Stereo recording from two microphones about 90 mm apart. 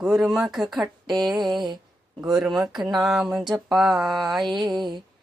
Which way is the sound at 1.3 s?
55° right (ahead or behind).